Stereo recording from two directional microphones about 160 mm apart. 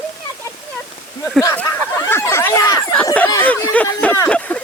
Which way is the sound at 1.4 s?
15° left (ahead or behind).